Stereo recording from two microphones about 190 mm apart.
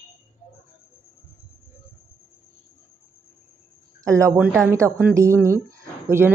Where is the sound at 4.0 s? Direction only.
15° right (ahead or behind).